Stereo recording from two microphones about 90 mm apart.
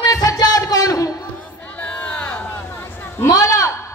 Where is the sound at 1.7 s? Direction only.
15° left (ahead or behind).